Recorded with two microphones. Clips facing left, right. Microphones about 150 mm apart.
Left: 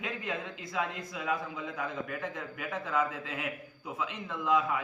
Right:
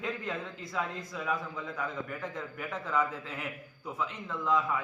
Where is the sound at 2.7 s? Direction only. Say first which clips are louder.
Even; 15° left (ahead or behind).